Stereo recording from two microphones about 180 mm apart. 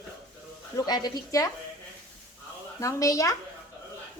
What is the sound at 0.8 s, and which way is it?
Speech, 20° left (ahead or behind).